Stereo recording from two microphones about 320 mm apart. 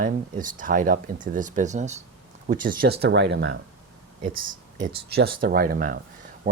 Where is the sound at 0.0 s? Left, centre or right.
Right.